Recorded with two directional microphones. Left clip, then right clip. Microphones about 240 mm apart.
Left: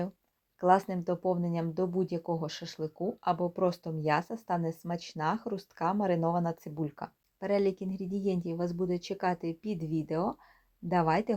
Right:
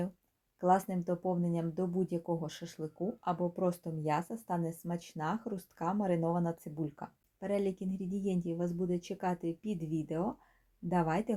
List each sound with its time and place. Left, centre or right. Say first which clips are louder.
0.6 s speech: left 4 dB; centre